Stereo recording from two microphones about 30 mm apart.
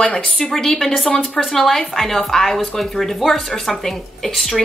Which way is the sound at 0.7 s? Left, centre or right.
Centre.